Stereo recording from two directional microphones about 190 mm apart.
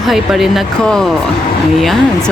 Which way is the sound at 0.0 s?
Centre (ahead or behind).